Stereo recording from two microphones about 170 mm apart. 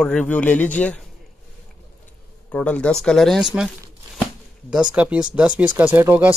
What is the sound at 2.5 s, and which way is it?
Speech, 10° left (ahead or behind).